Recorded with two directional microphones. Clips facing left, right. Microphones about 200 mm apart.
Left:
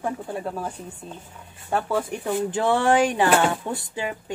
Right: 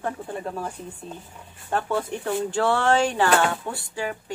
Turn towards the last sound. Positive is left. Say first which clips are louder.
# left 1 dB
turn(degrees=20)  # may be behind; listen again after turning